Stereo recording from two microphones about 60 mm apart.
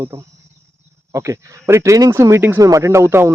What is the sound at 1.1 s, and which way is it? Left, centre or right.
Speech, right.